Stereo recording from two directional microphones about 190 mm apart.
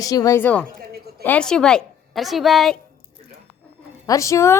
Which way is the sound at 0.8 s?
55° right (ahead or behind).